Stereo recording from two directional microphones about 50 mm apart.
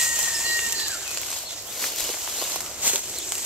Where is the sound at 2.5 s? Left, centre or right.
Right.